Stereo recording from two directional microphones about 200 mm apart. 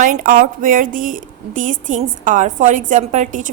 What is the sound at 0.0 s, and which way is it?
A woman's voice, 40° right (ahead or behind).